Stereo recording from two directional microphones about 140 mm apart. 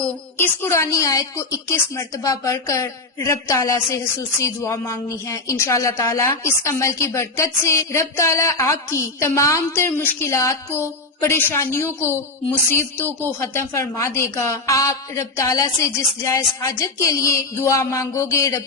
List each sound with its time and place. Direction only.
0.3 s a woman's voice: 15° left (ahead or behind)